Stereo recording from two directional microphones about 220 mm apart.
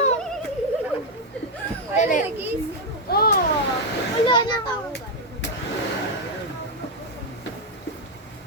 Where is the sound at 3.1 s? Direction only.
45° left (ahead or behind).